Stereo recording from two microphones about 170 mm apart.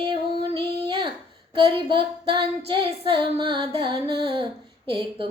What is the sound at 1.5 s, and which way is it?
Child singing, 30° right (ahead or behind).